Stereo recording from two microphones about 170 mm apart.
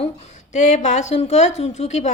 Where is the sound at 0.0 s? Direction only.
40° left (ahead or behind).